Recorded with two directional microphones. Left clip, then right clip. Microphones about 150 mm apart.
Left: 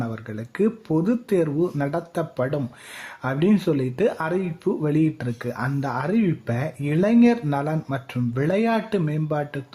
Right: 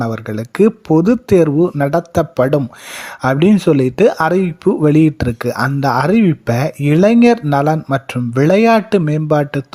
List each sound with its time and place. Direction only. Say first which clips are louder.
0.0 s speech: right 11 dB; 40° right (ahead or behind)